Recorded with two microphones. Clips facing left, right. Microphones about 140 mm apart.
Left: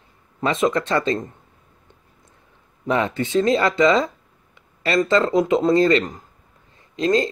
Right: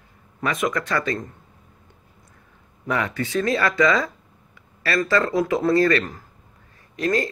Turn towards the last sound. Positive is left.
turn(degrees=20)  # may be behind; listen again after turning